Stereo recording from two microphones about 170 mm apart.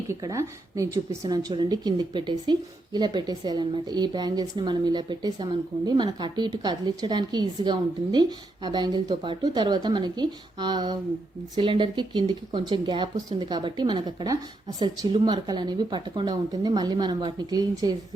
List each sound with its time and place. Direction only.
0.1 s speech: 20° right (ahead or behind)